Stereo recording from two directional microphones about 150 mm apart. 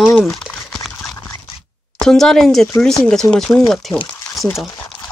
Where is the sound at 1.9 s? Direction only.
5° left (ahead or behind).